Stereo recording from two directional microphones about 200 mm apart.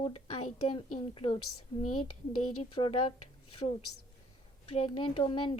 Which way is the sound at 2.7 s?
25° left (ahead or behind).